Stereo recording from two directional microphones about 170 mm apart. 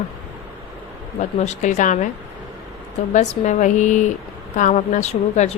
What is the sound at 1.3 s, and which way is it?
Speech, 45° left (ahead or behind).